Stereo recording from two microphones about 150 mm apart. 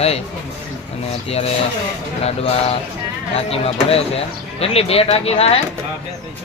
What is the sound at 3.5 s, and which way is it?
Speech, 40° left (ahead or behind).